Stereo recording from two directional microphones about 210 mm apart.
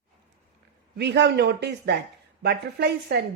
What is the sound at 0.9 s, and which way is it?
Speech, 55° right (ahead or behind).